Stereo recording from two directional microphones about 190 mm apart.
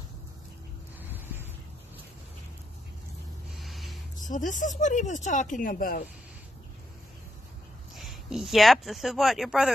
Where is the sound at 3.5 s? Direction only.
Centre (ahead or behind).